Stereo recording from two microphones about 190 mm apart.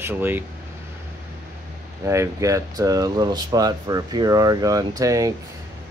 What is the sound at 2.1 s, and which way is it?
Speech, 15° right (ahead or behind).